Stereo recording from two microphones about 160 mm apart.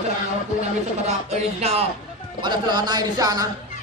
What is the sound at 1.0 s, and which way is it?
Speech, 40° right (ahead or behind).